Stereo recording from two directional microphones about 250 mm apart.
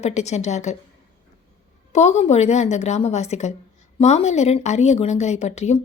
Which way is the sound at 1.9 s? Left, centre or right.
Left.